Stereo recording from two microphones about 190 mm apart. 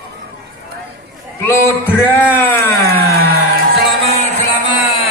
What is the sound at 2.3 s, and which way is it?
Music, 10° left (ahead or behind).